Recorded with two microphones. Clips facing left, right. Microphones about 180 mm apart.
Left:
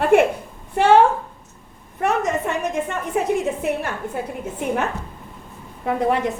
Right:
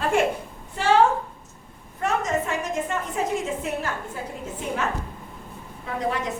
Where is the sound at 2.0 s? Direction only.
60° left (ahead or behind).